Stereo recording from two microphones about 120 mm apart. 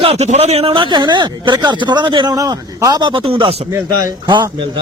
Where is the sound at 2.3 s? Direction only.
30° right (ahead or behind).